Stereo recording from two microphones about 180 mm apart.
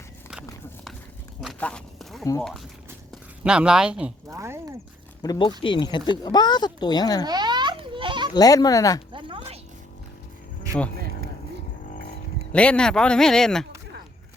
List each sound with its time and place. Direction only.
1.5 s speech: 5° left (ahead or behind)
4.3 s speech: 15° right (ahead or behind)
5.2 s speech: 25° left (ahead or behind)
7.3 s a sound: 25° right (ahead or behind)
8.3 s speech: 20° left (ahead or behind)
9.1 s a sound: 30° right (ahead or behind)
12.5 s speech: 5° left (ahead or behind)